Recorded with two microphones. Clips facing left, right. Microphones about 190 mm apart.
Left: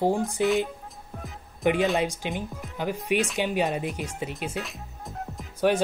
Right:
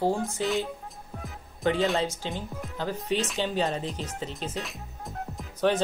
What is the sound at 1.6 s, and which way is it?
Speech, 15° left (ahead or behind).